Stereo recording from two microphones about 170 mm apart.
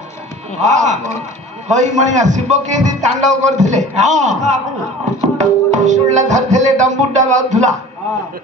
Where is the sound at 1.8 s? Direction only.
45° right (ahead or behind).